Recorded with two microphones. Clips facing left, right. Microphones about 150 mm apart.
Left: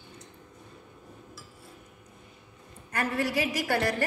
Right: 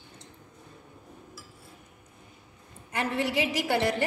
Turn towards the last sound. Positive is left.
turn(degrees=-20)  # may be behind; listen again after turning